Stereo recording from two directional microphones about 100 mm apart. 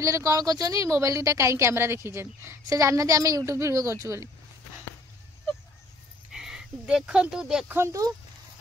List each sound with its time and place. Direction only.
0.0 s speech: 30° right (ahead or behind)
6.3 s speech: 5° right (ahead or behind)
7.6 s speech: 20° right (ahead or behind)